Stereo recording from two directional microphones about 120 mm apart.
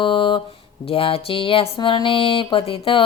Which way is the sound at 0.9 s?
50° left (ahead or behind).